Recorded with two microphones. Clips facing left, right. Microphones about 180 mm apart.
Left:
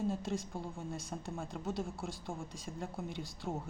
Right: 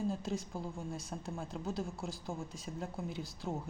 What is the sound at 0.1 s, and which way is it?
Speech, centre (ahead or behind).